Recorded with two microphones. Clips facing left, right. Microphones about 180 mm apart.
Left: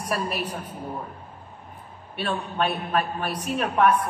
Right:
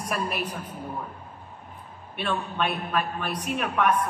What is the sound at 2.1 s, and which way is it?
A man's voice, 35° left (ahead or behind).